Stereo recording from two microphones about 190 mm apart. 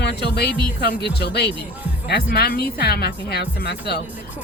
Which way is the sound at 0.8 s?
60° left (ahead or behind).